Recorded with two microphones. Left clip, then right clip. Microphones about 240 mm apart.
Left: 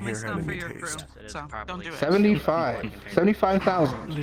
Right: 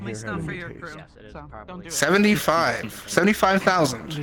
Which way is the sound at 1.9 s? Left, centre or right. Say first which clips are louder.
Right 3 dB; right.